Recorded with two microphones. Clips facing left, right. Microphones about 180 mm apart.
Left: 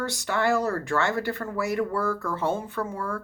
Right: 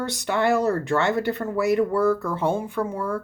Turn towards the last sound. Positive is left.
turn(degrees=-20)  # may be behind; listen again after turning